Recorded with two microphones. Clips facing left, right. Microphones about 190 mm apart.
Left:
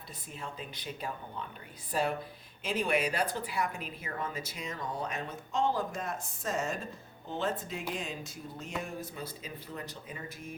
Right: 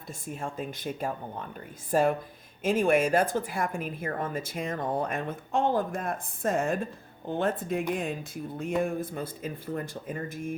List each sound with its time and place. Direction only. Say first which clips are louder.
0.1 s speech: right 8 dB; 45° right (ahead or behind)